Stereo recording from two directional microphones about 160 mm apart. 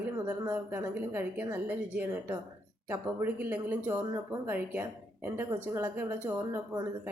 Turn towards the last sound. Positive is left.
turn(degrees=-20)  # may be behind; listen again after turning